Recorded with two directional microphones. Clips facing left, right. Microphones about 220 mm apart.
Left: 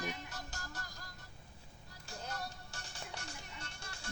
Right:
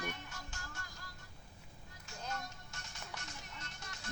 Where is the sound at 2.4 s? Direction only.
30° left (ahead or behind).